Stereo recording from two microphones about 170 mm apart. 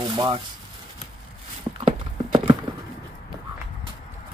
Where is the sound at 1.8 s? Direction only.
30° right (ahead or behind).